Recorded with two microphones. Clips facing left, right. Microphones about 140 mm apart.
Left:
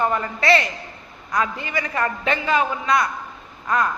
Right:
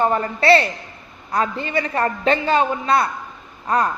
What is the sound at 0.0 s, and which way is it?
A man's voice, 35° right (ahead or behind).